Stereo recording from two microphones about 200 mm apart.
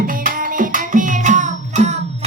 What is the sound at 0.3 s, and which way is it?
Music, 40° right (ahead or behind).